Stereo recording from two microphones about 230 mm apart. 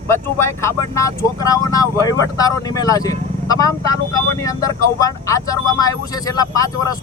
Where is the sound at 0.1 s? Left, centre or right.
Centre.